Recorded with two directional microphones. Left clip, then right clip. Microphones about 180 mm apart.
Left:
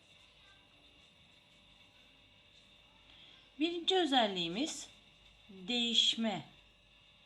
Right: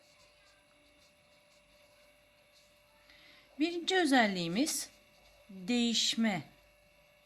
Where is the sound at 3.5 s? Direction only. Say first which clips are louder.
Right 1 dB; 35° right (ahead or behind).